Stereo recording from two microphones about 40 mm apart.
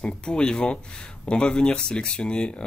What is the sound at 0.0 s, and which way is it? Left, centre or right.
Speech, centre.